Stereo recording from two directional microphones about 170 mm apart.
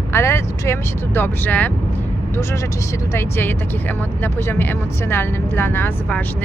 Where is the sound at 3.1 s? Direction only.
15° left (ahead or behind).